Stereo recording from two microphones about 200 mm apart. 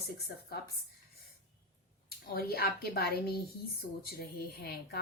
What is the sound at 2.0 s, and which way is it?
A woman's voice, 50° left (ahead or behind).